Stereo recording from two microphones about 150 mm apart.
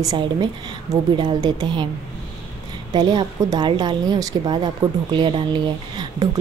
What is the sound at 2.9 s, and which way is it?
Speech, 25° right (ahead or behind).